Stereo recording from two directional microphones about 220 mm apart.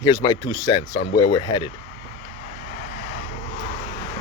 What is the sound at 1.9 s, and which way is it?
Vehicle, 35° left (ahead or behind).